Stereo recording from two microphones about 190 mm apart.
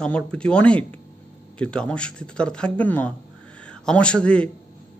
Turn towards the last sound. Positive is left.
turn(degrees=5)  # may be behind; listen again after turning